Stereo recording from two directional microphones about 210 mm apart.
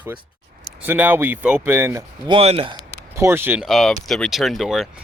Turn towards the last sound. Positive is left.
turn(degrees=0)  # may be behind; listen again after turning